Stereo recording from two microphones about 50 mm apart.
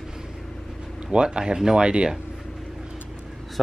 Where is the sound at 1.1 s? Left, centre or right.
Centre.